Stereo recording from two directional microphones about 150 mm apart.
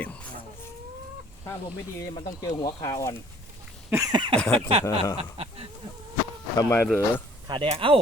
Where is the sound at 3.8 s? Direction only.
20° right (ahead or behind).